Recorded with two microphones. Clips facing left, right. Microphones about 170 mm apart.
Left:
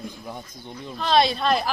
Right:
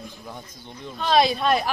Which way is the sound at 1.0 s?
Centre (ahead or behind).